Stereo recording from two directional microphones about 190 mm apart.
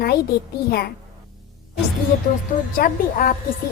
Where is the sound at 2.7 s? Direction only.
50° left (ahead or behind).